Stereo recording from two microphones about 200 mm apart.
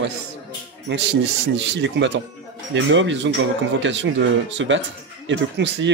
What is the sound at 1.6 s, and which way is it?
Speech, 65° right (ahead or behind).